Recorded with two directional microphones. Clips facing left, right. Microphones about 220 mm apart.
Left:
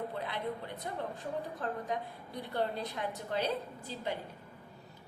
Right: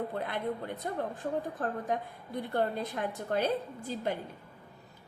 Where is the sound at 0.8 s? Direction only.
50° right (ahead or behind).